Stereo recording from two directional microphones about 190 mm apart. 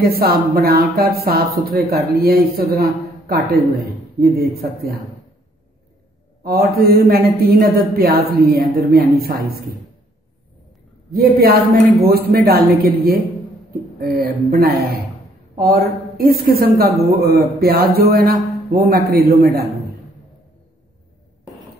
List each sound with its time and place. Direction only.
0.0 s speech: 55° right (ahead or behind)
6.4 s speech: 50° right (ahead or behind)
11.1 s a woman's voice: 55° right (ahead or behind)